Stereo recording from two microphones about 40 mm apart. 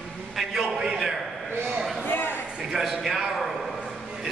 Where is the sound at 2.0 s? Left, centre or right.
Left.